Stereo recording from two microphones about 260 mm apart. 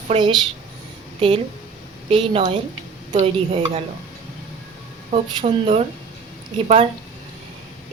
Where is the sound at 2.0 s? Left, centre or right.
Right.